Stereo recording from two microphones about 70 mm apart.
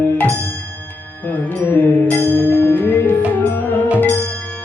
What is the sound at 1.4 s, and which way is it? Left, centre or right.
Music, left.